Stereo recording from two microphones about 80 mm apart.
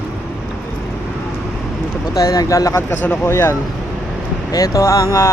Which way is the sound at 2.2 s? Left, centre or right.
Left.